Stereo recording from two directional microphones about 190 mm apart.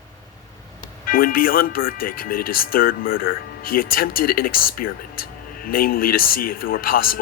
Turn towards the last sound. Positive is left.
turn(degrees=50)  # may be behind; listen again after turning